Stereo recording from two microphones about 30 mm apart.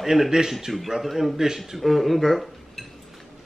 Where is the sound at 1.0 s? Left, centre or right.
Centre.